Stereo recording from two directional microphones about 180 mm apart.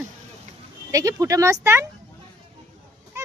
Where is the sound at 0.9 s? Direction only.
20° right (ahead or behind).